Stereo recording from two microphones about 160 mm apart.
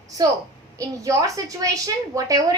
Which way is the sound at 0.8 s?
20° right (ahead or behind).